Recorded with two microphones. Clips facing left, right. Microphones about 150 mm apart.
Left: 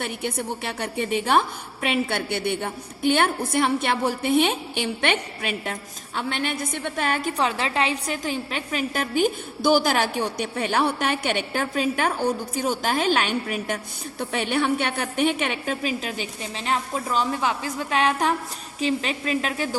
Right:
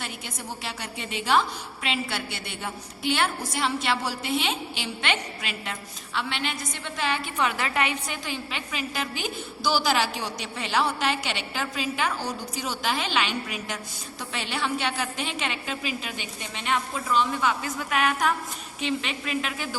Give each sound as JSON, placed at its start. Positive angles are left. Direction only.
{"t": 0.0, "sound": "a woman's voice", "side_deg": 60}